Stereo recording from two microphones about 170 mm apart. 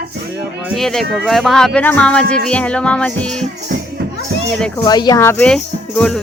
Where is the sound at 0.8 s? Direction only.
Centre (ahead or behind).